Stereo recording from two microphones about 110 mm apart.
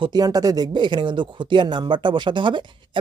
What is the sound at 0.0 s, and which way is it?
Speech, 40° right (ahead or behind).